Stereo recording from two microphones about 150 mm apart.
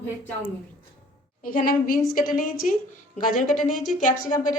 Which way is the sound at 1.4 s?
70° left (ahead or behind).